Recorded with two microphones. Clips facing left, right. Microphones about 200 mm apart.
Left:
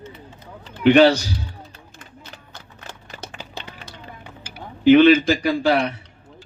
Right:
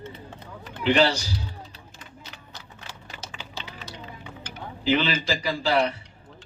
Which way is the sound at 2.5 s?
55° left (ahead or behind).